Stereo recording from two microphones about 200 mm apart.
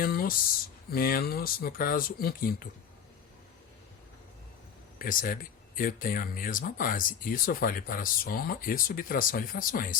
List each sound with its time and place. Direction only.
0.0 s speech: 45° left (ahead or behind)
4.9 s speech: 45° left (ahead or behind)